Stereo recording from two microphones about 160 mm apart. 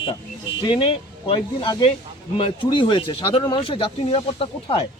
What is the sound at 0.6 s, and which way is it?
Speech, 30° left (ahead or behind).